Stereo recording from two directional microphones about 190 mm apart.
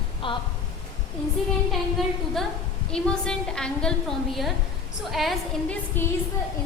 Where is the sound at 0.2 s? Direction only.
25° left (ahead or behind).